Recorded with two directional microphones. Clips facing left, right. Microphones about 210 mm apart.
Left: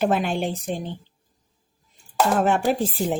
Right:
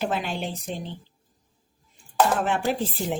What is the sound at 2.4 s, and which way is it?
Speech, 45° left (ahead or behind).